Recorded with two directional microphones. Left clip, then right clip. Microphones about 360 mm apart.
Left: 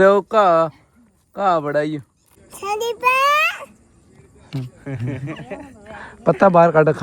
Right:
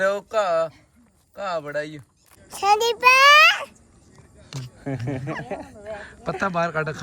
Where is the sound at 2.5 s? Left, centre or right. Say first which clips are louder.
Right 4 dB; centre.